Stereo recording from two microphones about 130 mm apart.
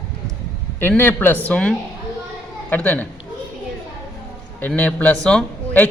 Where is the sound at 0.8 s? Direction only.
15° left (ahead or behind).